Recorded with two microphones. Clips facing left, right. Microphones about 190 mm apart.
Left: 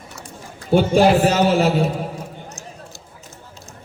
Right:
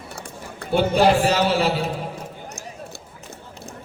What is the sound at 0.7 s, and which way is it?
Speech, 45° left (ahead or behind).